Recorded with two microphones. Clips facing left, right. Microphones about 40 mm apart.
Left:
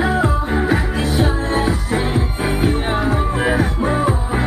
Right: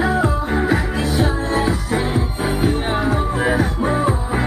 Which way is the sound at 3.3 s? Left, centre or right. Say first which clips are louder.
Left 1 dB; centre.